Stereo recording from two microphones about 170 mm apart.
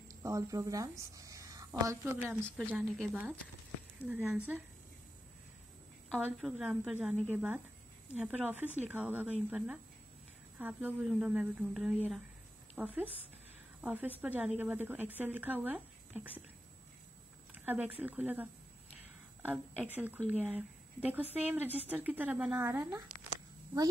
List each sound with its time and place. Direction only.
0.1 s a woman's voice: 20° right (ahead or behind)
2.4 s a woman's voice: 5° left (ahead or behind)
2.7 s a woman's voice: 5° right (ahead or behind)
6.0 s a woman's voice: centre (ahead or behind)
17.6 s speech: 10° right (ahead or behind)